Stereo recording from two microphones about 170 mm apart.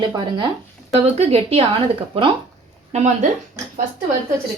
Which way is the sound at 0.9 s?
35° right (ahead or behind).